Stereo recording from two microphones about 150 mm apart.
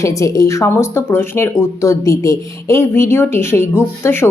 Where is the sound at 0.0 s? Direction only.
20° left (ahead or behind).